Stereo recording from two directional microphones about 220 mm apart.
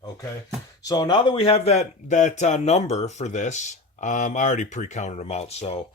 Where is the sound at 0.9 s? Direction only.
20° left (ahead or behind).